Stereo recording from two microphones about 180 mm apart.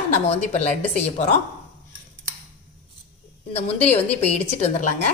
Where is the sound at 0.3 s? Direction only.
35° left (ahead or behind).